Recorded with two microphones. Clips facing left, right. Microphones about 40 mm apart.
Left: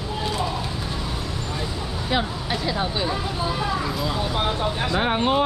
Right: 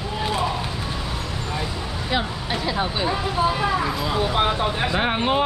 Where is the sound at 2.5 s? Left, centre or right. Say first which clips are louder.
Right 1 dB; centre.